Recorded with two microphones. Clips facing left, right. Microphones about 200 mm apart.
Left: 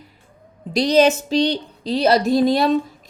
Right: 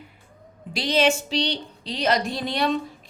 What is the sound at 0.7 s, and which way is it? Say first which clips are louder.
A woman's voice: left 7 dB; 40° left (ahead or behind).